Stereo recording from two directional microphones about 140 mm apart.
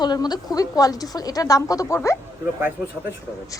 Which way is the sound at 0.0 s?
30° left (ahead or behind).